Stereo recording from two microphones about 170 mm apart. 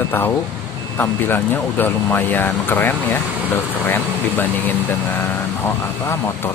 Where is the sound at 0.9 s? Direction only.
15° left (ahead or behind).